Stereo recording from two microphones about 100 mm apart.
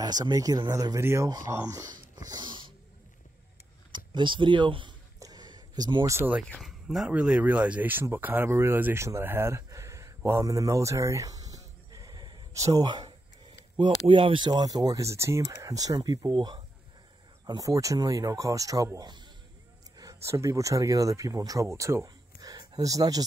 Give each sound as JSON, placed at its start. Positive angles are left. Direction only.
{"t": 0.0, "sound": "speech", "side_deg": -40}
{"t": 1.7, "sound": "a sound", "side_deg": -35}
{"t": 3.9, "sound": "speech", "side_deg": -50}
{"t": 5.2, "sound": "a sound", "side_deg": -45}
{"t": 6.6, "sound": "speech", "side_deg": 0}
{"t": 7.1, "sound": "speech", "side_deg": -15}
{"t": 12.5, "sound": "speech", "side_deg": -35}
{"t": 12.8, "sound": "speech", "side_deg": -45}
{"t": 14.0, "sound": "speech", "side_deg": -60}
{"t": 17.5, "sound": "speech", "side_deg": -35}
{"t": 20.0, "sound": "speech", "side_deg": -35}